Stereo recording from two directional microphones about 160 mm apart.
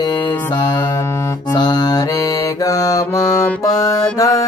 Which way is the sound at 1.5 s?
25° left (ahead or behind).